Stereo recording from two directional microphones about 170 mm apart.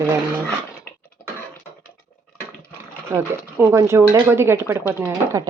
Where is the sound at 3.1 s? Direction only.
15° right (ahead or behind).